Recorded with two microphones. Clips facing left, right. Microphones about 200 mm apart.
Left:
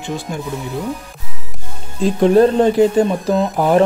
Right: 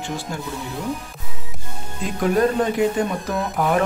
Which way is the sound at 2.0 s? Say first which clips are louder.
Left 8 dB; 30° left (ahead or behind).